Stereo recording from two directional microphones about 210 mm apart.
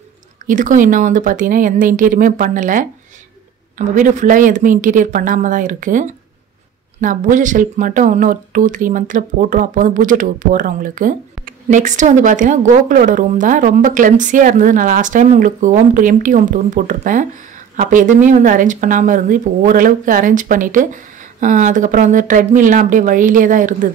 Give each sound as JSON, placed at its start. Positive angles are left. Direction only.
{"t": 0.5, "sound": "speech", "side_deg": -40}